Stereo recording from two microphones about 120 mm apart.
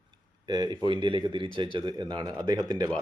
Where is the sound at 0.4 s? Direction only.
35° right (ahead or behind).